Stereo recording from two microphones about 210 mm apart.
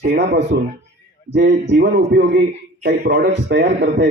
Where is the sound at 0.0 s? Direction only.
50° right (ahead or behind).